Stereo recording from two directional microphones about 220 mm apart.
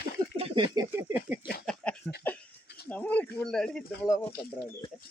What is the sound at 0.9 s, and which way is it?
Speech, 10° right (ahead or behind).